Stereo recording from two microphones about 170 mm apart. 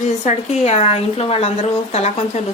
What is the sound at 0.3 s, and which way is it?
A woman's voice, 40° left (ahead or behind).